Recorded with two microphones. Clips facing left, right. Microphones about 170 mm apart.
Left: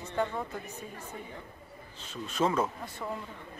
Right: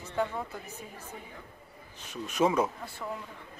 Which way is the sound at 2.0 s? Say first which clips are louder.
Right 3 dB; 15° right (ahead or behind).